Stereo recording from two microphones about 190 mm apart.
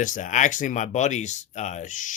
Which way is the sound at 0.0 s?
45° left (ahead or behind).